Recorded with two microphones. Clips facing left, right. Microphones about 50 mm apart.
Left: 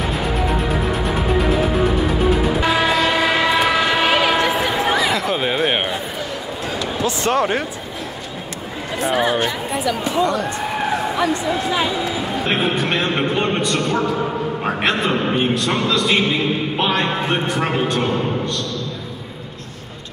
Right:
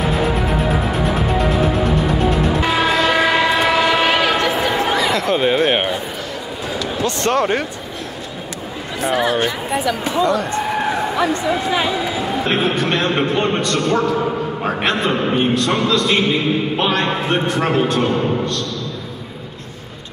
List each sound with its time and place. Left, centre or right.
0.0 s music: centre
4.4 s a sound: centre
6.8 s speech: centre
9.0 s a man's voice: centre
12.4 s a man's voice: centre